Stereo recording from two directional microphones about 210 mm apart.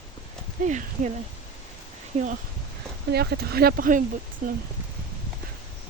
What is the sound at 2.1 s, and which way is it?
Speech, 30° right (ahead or behind).